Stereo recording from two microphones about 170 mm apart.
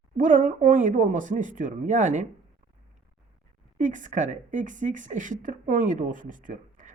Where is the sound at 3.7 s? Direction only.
50° right (ahead or behind).